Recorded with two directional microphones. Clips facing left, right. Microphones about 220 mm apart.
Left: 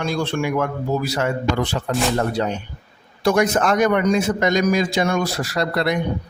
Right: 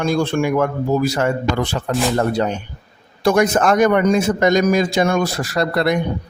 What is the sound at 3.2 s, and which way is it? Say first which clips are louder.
A man's voice: right 3 dB; 50° right (ahead or behind).